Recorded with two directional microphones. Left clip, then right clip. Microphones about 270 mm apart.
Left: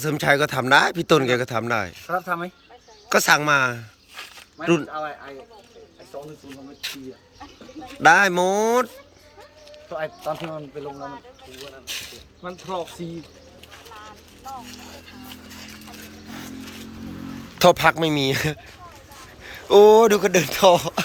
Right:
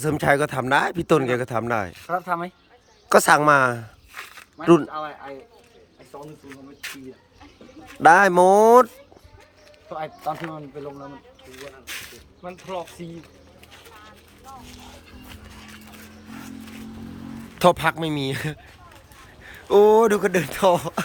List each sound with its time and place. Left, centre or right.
0.0 s speech: centre
6.5 s speech: centre
8.0 s speech: centre
9.9 s speech: centre
17.5 s a man's voice: centre